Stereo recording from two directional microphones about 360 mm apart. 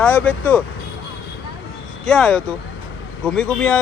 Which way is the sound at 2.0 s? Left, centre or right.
Centre.